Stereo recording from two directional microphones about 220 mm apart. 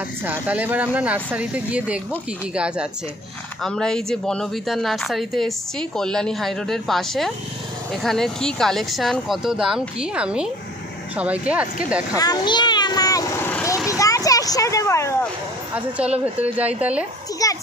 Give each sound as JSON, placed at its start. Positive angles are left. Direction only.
{"t": 0.2, "sound": "speech", "side_deg": -10}
{"t": 12.2, "sound": "vehicle", "side_deg": 20}
{"t": 13.8, "sound": "a sound", "side_deg": 15}
{"t": 15.7, "sound": "speech", "side_deg": -5}
{"t": 17.4, "sound": "a child's voice", "side_deg": 15}